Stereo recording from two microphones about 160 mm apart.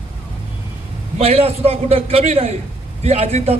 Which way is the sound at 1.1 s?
40° right (ahead or behind).